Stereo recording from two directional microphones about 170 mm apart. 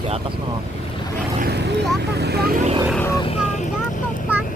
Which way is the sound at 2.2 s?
70° right (ahead or behind).